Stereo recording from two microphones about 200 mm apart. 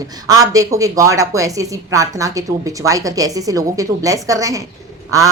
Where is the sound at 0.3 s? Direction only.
15° right (ahead or behind).